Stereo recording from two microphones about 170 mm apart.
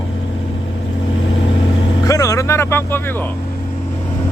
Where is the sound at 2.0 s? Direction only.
20° left (ahead or behind).